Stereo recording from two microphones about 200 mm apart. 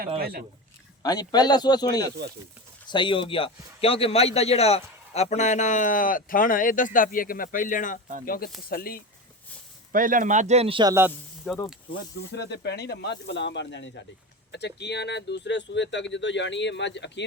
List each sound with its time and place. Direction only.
0.2 s a man's voice: 50° right (ahead or behind)
1.0 s a man's voice: 20° left (ahead or behind); by 9.0 s 50° left (ahead or behind)
9.9 s speech: 45° right (ahead or behind); by 10.9 s 25° right (ahead or behind)
11.5 s snake: 5° right (ahead or behind)
12.3 s speech: 55° left (ahead or behind)